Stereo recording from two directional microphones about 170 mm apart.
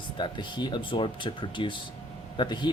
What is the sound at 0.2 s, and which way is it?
Speech, 25° left (ahead or behind).